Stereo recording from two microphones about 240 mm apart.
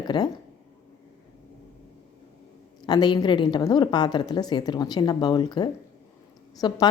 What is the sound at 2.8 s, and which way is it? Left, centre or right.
A woman's voice, centre.